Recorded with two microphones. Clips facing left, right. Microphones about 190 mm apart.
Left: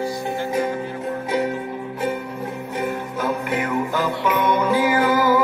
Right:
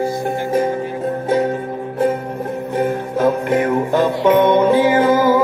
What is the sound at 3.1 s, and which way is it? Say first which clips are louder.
Music: right 9 dB; 35° right (ahead or behind).